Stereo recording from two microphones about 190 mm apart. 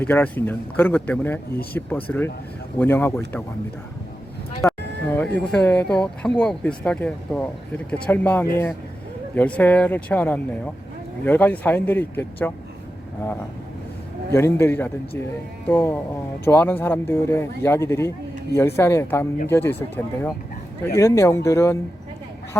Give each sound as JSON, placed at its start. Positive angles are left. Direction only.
{"t": 0.0, "sound": "speech", "side_deg": 10}
{"t": 4.6, "sound": "a sound", "side_deg": 15}
{"t": 5.4, "sound": "speech", "side_deg": 5}
{"t": 14.3, "sound": "speech", "side_deg": 15}